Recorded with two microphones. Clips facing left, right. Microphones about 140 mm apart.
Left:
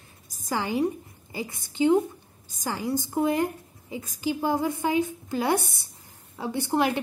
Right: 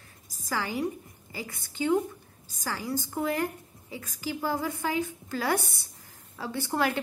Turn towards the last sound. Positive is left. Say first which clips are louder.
# left 4 dB
turn(degrees=20)  # may be behind; listen again after turning